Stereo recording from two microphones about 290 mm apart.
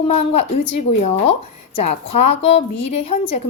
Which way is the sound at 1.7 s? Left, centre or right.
Left.